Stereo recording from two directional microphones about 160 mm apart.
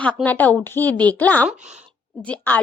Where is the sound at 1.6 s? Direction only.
45° right (ahead or behind).